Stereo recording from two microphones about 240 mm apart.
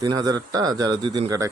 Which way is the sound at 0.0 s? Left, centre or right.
Centre.